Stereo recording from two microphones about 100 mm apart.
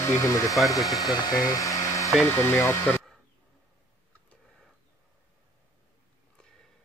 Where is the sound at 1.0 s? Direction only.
40° left (ahead or behind); by 2.7 s 25° left (ahead or behind).